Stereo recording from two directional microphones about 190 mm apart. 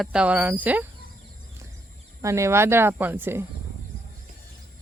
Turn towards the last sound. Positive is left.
turn(degrees=-10)  # may be behind; listen again after turning